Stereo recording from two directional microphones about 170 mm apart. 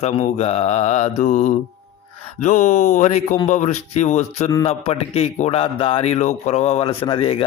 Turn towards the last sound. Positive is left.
turn(degrees=30)  # may be behind; listen again after turning